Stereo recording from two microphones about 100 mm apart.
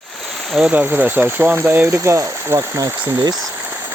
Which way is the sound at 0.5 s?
15° right (ahead or behind).